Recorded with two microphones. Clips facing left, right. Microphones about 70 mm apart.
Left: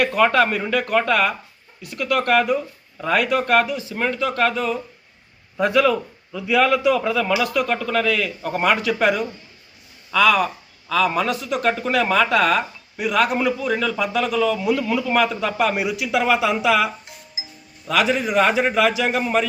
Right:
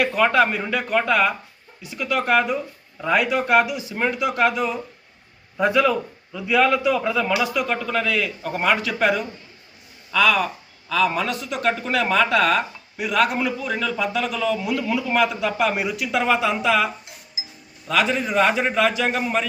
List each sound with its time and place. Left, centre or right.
0.0 s speech: centre
5.5 s speech: centre